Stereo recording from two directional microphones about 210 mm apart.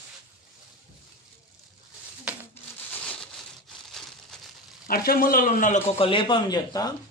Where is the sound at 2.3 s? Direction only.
5° right (ahead or behind).